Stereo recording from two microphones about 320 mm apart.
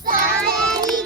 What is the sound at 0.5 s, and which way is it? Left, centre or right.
Child singing, centre.